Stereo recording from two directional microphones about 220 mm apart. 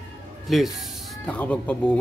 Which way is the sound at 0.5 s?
Centre (ahead or behind).